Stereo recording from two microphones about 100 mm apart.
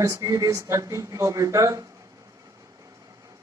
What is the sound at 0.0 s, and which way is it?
Speech, 35° right (ahead or behind).